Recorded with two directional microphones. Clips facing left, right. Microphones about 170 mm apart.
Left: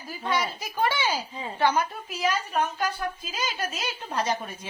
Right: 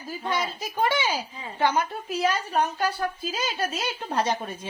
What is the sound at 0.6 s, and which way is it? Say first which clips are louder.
A woman's voice: right 1 dB; 25° right (ahead or behind).